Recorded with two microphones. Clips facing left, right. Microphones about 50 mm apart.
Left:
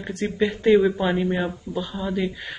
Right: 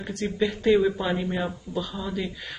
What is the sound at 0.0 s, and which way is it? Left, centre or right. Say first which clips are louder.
Speech: left 3 dB; left.